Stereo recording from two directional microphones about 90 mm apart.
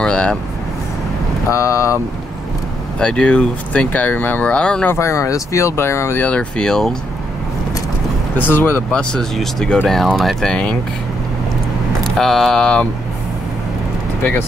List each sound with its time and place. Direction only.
0.0 s speech: 10° left (ahead or behind)
1.5 s speech: 35° left (ahead or behind)
3.0 s speech: 10° left (ahead or behind)
4.9 s speech: 30° left (ahead or behind)
6.2 s speech: 15° left (ahead or behind)
8.4 s speech: 20° left (ahead or behind)
8.9 s speech: 5° left (ahead or behind)
12.0 s speech: 5° left (ahead or behind)